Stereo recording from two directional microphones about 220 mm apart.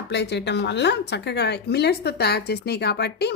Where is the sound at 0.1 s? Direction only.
50° left (ahead or behind).